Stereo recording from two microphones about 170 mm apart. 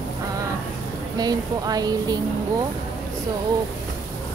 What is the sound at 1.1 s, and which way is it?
Speech, 20° right (ahead or behind).